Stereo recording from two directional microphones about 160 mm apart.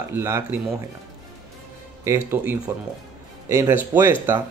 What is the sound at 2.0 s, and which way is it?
Speech, 15° right (ahead or behind).